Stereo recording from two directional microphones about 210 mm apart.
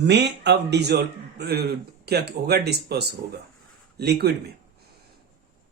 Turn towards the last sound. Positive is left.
turn(degrees=-50)  # may be behind; listen again after turning